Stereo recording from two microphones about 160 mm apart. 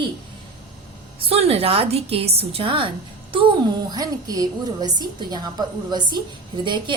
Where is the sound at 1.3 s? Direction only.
40° right (ahead or behind).